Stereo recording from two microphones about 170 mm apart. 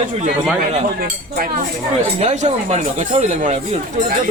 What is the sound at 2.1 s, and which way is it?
Speech, 40° right (ahead or behind).